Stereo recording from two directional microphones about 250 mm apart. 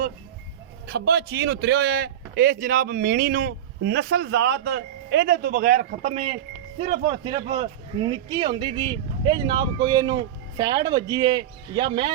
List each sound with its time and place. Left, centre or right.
0.9 s a man's voice: right; by 12.1 s centre